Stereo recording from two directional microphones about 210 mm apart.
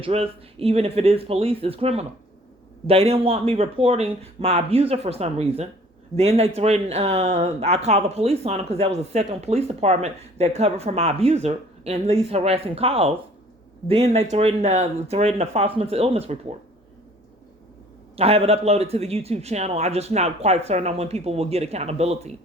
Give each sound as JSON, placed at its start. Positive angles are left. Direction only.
{"t": 0.0, "sound": "speech", "side_deg": -30}
{"t": 18.2, "sound": "speech", "side_deg": -30}